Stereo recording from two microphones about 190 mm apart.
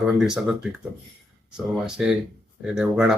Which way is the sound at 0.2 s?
5° right (ahead or behind).